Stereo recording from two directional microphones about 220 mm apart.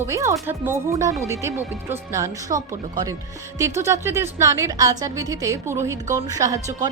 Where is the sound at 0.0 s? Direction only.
15° right (ahead or behind).